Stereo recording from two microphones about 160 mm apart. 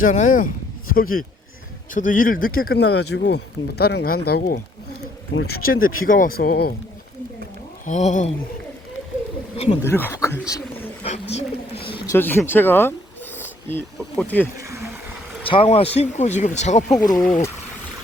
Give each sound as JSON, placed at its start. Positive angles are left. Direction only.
{"t": 0.0, "sound": "speech", "side_deg": 55}
{"t": 1.9, "sound": "speech", "side_deg": 55}
{"t": 7.9, "sound": "speech", "side_deg": 50}
{"t": 9.8, "sound": "speech", "side_deg": 15}
{"t": 11.0, "sound": "bird", "side_deg": 40}
{"t": 12.0, "sound": "speech", "side_deg": 15}
{"t": 13.4, "sound": "a sound", "side_deg": 15}
{"t": 14.2, "sound": "speech", "side_deg": 10}
{"t": 15.4, "sound": "speech", "side_deg": 35}
{"t": 17.0, "sound": "speech", "side_deg": 25}